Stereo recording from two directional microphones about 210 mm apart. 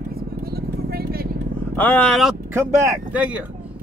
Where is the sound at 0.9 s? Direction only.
45° right (ahead or behind).